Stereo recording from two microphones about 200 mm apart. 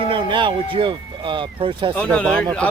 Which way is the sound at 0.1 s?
25° right (ahead or behind).